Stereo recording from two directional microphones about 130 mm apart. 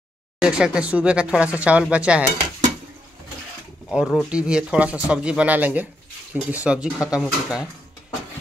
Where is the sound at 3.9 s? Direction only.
5° right (ahead or behind).